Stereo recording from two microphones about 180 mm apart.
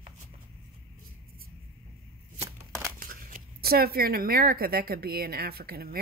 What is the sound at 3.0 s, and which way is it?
Speech, 50° right (ahead or behind).